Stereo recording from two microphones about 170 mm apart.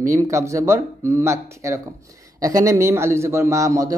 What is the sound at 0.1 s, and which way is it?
Speech, 15° right (ahead or behind).